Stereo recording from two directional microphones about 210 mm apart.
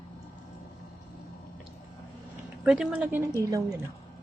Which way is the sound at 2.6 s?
5° right (ahead or behind).